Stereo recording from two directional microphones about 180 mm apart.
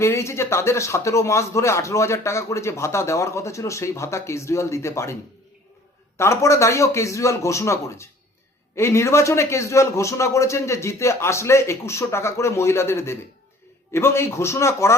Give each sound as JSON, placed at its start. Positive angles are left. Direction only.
{"t": 0.0, "sound": "speech", "side_deg": 15}
{"t": 6.1, "sound": "speech", "side_deg": 15}